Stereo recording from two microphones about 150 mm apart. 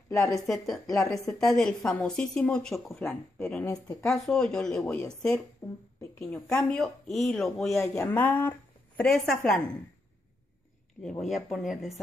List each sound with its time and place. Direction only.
0.1 s speech: 20° left (ahead or behind)
0.5 s a woman's voice: centre (ahead or behind)
5.6 s speech: 15° left (ahead or behind)
6.3 s a woman's voice: 5° left (ahead or behind)
7.9 s speech: 15° left (ahead or behind)
11.0 s a woman's voice: 5° left (ahead or behind)